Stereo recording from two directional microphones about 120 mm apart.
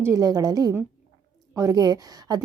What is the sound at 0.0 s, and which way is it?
A woman's voice, 30° right (ahead or behind).